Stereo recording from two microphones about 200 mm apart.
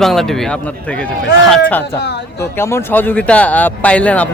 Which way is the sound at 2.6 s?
10° left (ahead or behind).